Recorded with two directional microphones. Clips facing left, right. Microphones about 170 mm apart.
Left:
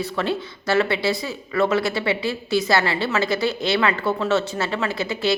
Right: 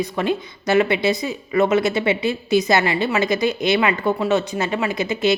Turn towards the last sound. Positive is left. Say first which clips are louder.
# right 3 dB
turn(degrees=-20)  # may be behind; listen again after turning